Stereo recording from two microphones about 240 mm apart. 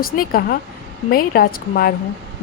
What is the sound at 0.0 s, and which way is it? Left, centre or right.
A woman's voice, left.